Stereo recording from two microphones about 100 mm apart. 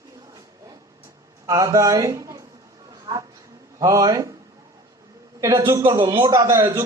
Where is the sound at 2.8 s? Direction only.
40° right (ahead or behind).